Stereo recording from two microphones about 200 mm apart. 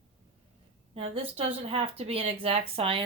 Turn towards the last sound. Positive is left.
turn(degrees=-30)  # may be behind; listen again after turning